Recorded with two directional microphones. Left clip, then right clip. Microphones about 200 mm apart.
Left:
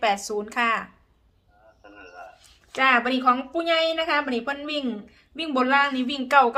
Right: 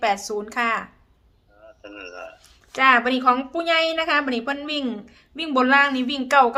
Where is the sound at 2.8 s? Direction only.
10° right (ahead or behind).